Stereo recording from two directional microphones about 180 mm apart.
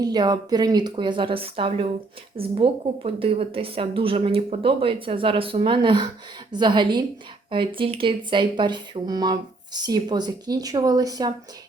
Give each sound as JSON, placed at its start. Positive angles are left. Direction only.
{"t": 0.0, "sound": "a woman's voice", "side_deg": -20}